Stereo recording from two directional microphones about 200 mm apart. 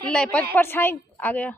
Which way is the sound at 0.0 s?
5° left (ahead or behind).